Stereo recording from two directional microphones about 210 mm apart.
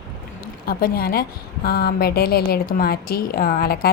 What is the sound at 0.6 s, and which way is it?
A woman's voice, 45° left (ahead or behind).